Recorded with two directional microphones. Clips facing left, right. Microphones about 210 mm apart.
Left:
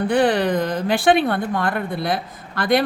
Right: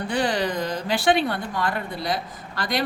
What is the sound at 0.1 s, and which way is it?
Speech, 55° left (ahead or behind).